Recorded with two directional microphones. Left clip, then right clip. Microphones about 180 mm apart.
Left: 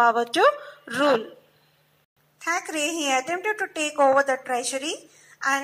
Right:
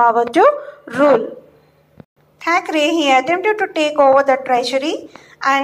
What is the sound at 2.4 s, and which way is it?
Speech, 75° left (ahead or behind).